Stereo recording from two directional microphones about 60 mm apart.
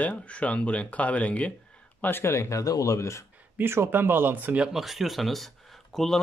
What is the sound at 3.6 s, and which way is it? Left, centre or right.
Speech, right.